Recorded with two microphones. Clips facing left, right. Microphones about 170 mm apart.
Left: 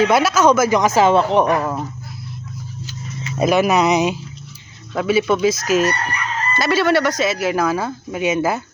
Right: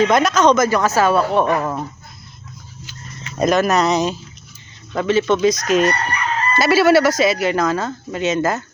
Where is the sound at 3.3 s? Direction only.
10° left (ahead or behind).